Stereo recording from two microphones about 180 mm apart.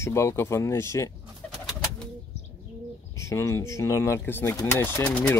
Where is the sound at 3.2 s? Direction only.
15° left (ahead or behind).